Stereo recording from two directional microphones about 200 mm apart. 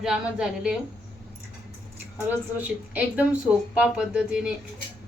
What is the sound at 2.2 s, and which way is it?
Speech, 10° right (ahead or behind).